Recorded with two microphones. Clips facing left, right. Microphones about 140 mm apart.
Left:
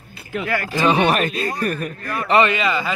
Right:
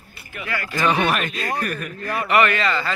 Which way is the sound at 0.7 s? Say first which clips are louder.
Left 3 dB; 20° left (ahead or behind).